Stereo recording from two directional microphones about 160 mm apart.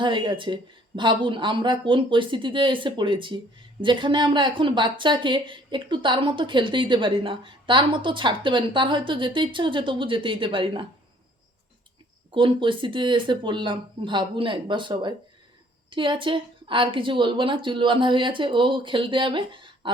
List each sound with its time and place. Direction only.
0.0 s speech: 30° right (ahead or behind)
12.3 s speech: 30° right (ahead or behind)